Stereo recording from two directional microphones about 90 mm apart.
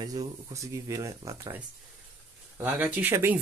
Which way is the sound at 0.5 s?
35° right (ahead or behind).